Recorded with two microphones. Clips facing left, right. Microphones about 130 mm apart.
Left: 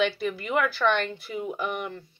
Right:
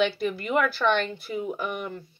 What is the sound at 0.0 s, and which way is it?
Speech, 40° right (ahead or behind).